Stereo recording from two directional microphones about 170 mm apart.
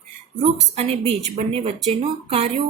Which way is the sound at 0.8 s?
35° right (ahead or behind).